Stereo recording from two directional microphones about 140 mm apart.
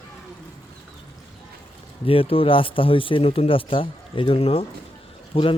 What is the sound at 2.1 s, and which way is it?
Speech, 40° left (ahead or behind).